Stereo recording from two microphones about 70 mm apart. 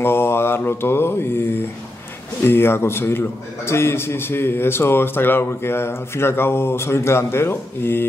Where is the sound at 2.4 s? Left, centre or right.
Left.